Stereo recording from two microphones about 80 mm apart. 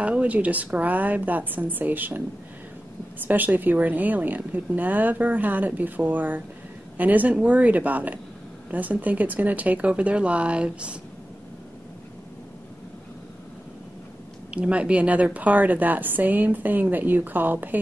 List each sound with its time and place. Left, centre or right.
0.0 s a woman's voice: centre
3.3 s a woman's voice: right
14.5 s a woman's voice: centre